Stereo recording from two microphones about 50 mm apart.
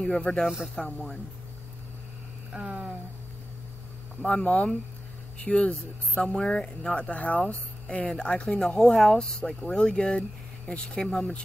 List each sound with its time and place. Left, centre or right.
0.0 s speech: centre
2.5 s a sound: centre
4.3 s speech: left
8.5 s speech: centre